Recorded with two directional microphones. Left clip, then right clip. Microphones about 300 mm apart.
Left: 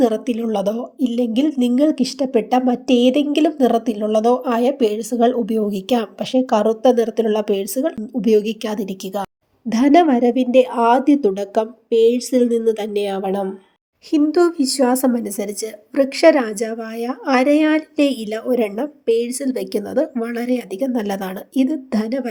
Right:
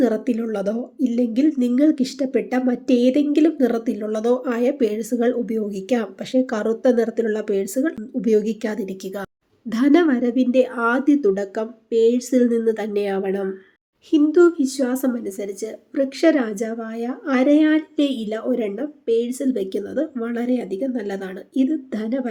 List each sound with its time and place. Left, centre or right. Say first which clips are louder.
0.0 s a woman's voice: left 3 dB; centre